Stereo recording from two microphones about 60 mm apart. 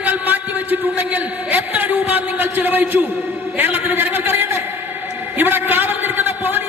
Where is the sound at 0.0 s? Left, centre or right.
Right.